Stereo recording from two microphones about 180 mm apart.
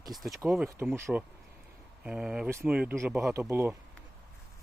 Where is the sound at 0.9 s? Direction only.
10° right (ahead or behind).